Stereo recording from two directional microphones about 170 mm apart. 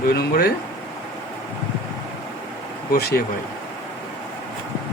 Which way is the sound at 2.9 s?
70° left (ahead or behind).